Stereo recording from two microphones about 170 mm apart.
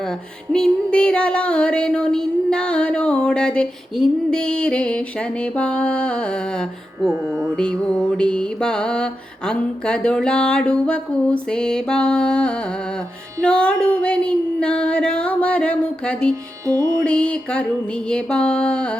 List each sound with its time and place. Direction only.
0.5 s music: 5° left (ahead or behind)
7.1 s music: 15° right (ahead or behind)
7.5 s music: 5° left (ahead or behind)
13.4 s female singing: 5° left (ahead or behind)
16.6 s music: 20° right (ahead or behind)
17.0 s female singing: 5° left (ahead or behind)
18.1 s music: 5° left (ahead or behind)